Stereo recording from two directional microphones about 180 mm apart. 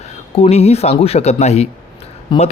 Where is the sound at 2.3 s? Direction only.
25° left (ahead or behind).